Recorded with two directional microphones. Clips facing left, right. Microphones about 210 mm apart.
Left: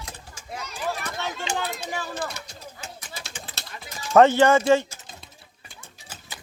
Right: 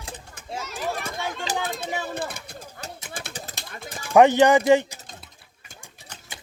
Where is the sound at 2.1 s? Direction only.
55° right (ahead or behind).